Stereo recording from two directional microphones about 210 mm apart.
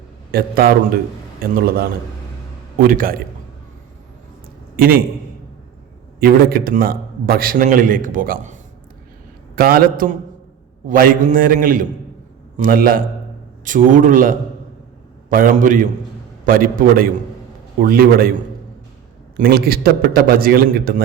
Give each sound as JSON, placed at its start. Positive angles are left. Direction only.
{"t": 0.3, "sound": "a man's voice", "side_deg": -45}
{"t": 4.8, "sound": "a man's voice", "side_deg": -45}
{"t": 6.1, "sound": "a man's voice", "side_deg": -45}
{"t": 9.6, "sound": "a man's voice", "side_deg": -45}